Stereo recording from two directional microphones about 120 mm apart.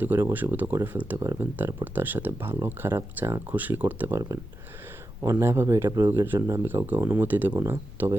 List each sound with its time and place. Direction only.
0.0 s speech: 20° right (ahead or behind)
5.2 s speech: 25° right (ahead or behind)